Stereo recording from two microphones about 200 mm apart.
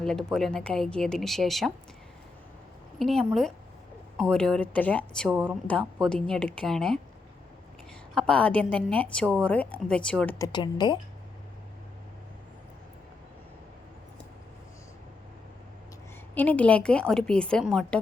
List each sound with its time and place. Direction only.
0.0 s a woman's voice: 5° left (ahead or behind)
3.0 s a woman's voice: centre (ahead or behind)
8.1 s a woman's voice: 5° left (ahead or behind)
10.3 s a woman's voice: 20° left (ahead or behind)
16.3 s a woman's voice: 10° left (ahead or behind)